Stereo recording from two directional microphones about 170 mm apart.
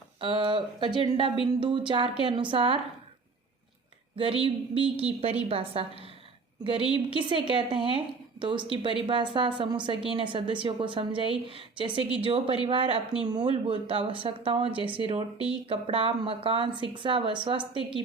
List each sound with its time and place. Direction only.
0.2 s a woman's voice: 30° right (ahead or behind)
4.2 s a woman's voice: 30° right (ahead or behind)